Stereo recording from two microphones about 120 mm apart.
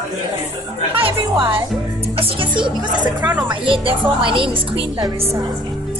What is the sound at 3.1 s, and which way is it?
Speech, 15° right (ahead or behind).